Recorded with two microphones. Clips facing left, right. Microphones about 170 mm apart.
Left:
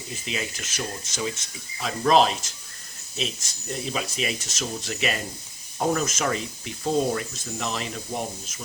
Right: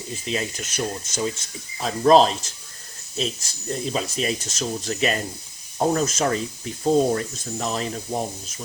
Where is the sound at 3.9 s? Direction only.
35° right (ahead or behind).